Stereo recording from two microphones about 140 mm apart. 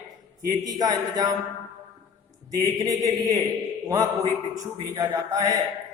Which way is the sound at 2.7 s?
25° right (ahead or behind).